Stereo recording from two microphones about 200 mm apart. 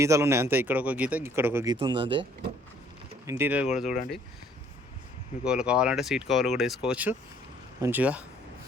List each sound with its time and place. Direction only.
0.0 s speech: 15° right (ahead or behind)
3.2 s speech: 10° right (ahead or behind)
5.5 s speech: 5° right (ahead or behind)